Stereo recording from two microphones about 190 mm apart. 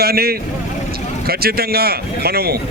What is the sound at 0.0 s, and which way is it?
Speech, 50° right (ahead or behind).